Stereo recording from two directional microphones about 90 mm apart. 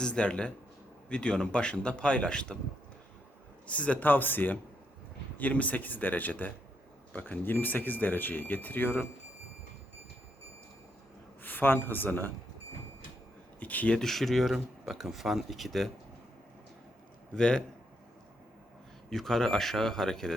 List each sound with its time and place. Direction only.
0.0 s speech: 10° left (ahead or behind)
3.7 s speech: 15° left (ahead or behind)
11.4 s speech: 20° left (ahead or behind)
13.6 s speech: 15° left (ahead or behind); by 15.9 s centre (ahead or behind)
17.3 s speech: 10° left (ahead or behind)
19.1 s speech: 5° left (ahead or behind)